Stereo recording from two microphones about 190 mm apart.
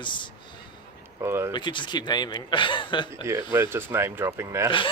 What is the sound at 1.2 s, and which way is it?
Speech, 15° right (ahead or behind).